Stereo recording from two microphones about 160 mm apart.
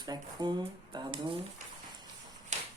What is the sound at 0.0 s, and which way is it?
Speech, 25° right (ahead or behind).